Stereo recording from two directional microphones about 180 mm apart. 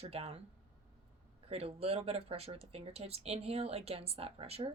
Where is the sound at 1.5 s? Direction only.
35° right (ahead or behind).